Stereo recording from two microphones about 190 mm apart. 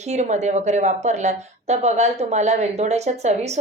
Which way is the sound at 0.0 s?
35° right (ahead or behind).